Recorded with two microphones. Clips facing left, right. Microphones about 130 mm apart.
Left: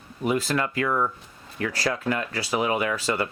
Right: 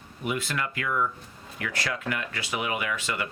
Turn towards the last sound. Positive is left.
turn(degrees=35)  # may be behind; listen again after turning